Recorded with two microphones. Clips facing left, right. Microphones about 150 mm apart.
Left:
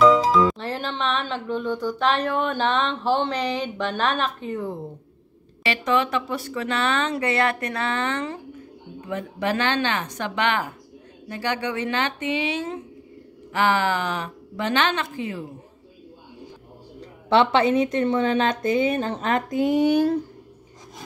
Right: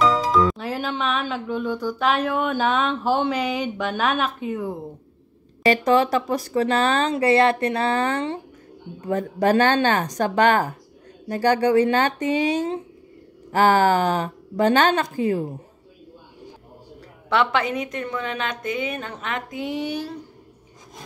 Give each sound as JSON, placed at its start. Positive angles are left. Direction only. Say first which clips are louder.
{"t": 0.0, "sound": "speech", "louder": "left 3 dB", "side_deg": 0}
{"t": 5.6, "sound": "speech", "louder": "right 5 dB", "side_deg": -40}
{"t": 17.3, "sound": "a woman's voice", "louder": "left 4 dB", "side_deg": 25}